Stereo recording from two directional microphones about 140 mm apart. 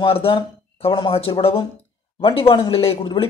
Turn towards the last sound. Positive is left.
turn(degrees=40)  # may be behind; listen again after turning